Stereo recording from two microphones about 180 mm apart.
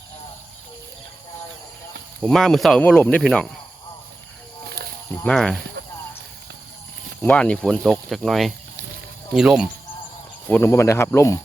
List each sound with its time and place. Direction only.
2.2 s speech: centre (ahead or behind)
4.7 s snake: 60° right (ahead or behind)
5.2 s speech: 5° left (ahead or behind)
5.8 s a sound: 65° right (ahead or behind)
7.2 s speech: 5° left (ahead or behind)
10.5 s speech: 15° left (ahead or behind)